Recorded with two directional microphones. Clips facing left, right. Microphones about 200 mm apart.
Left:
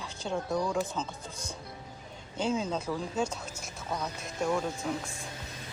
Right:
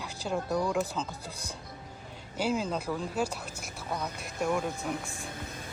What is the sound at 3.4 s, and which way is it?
Speech, 60° right (ahead or behind).